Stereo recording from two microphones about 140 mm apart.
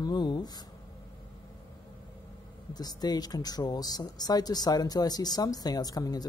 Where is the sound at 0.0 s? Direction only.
30° left (ahead or behind).